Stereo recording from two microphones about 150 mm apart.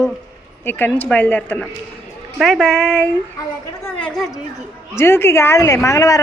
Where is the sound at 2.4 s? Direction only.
Centre (ahead or behind); by 6.2 s 20° left (ahead or behind).